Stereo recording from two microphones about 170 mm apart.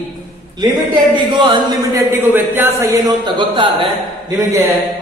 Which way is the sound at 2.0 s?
10° right (ahead or behind).